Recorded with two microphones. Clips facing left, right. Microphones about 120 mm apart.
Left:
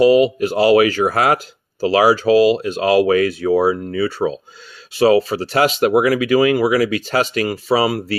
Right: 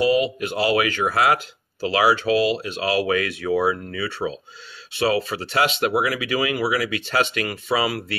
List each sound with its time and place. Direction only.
0.0 s speech: 40° left (ahead or behind)